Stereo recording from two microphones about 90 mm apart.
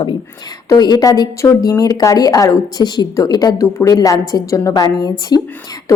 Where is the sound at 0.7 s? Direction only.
45° left (ahead or behind).